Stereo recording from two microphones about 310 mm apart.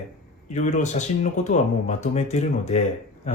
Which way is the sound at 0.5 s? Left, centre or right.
Left.